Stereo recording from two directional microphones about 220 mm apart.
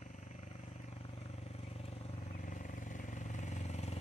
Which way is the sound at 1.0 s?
25° left (ahead or behind).